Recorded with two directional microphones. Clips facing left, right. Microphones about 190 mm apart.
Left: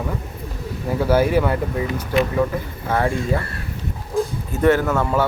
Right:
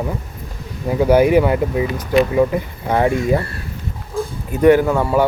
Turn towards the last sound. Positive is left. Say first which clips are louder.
# right 4 dB
turn(degrees=-10)  # may be behind; listen again after turning